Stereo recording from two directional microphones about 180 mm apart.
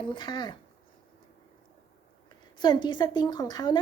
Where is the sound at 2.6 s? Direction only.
25° left (ahead or behind).